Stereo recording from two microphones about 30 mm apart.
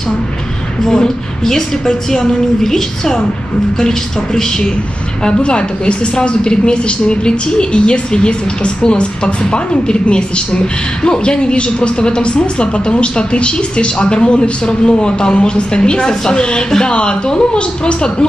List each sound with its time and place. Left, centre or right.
0.8 s a woman's voice: centre
5.2 s a woman's voice: left